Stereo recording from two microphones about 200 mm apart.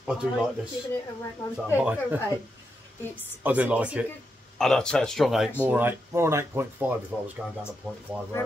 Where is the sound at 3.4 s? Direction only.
10° right (ahead or behind).